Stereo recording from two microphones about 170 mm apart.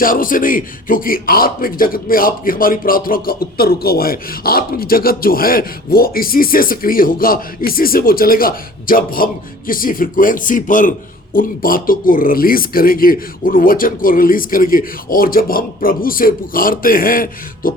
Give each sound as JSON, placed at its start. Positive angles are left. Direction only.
{"t": 0.0, "sound": "a man's voice", "side_deg": 55}